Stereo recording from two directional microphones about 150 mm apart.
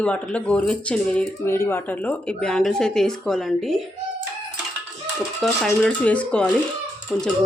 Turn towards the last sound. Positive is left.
turn(degrees=-10)  # may be behind; listen again after turning